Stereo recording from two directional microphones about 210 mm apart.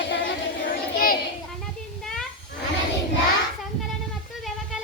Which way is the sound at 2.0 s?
Centre (ahead or behind).